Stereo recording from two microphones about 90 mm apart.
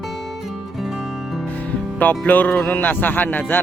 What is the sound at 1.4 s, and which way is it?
Speech, 20° left (ahead or behind).